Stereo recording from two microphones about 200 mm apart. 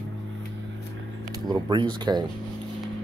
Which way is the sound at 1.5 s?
20° right (ahead or behind).